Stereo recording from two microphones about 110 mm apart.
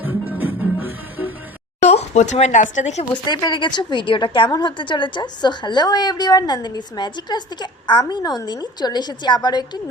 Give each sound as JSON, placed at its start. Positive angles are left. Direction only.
{"t": 0.0, "sound": "music", "side_deg": -15}
{"t": 1.8, "sound": "speech", "side_deg": 85}
{"t": 3.0, "sound": "a woman's voice", "side_deg": 40}